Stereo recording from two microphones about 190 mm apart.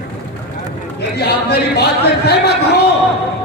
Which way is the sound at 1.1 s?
55° left (ahead or behind).